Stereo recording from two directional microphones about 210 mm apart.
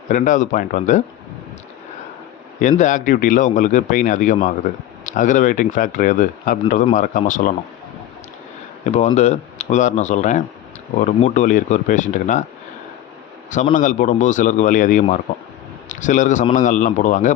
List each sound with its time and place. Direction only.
0.1 s a man's voice: 40° left (ahead or behind)
2.6 s a man's voice: 35° left (ahead or behind)
9.1 s a man's voice: 35° left (ahead or behind)
13.7 s a man's voice: 40° left (ahead or behind)